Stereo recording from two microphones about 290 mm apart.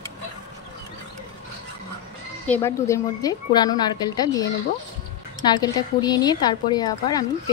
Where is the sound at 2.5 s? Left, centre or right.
Centre.